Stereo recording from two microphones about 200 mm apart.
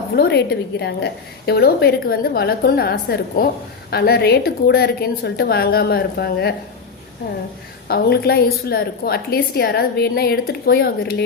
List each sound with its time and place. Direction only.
0.2 s a woman's voice: 55° left (ahead or behind)
7.9 s a woman's voice: 50° left (ahead or behind)